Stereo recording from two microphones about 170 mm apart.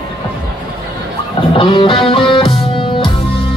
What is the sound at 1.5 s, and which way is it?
Music, 30° left (ahead or behind).